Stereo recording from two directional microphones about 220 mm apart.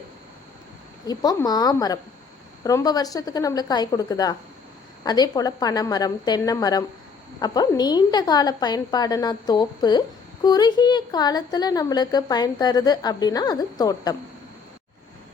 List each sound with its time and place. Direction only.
1.0 s a woman's voice: 15° left (ahead or behind)